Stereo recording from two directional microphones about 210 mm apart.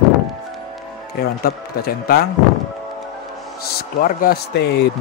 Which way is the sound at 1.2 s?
45° left (ahead or behind).